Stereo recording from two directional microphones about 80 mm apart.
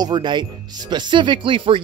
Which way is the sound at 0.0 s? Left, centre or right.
Right.